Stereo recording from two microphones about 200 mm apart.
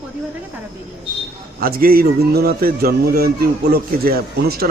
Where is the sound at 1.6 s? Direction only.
50° right (ahead or behind).